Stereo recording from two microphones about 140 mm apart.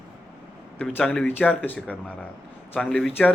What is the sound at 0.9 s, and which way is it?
Speech, 5° left (ahead or behind).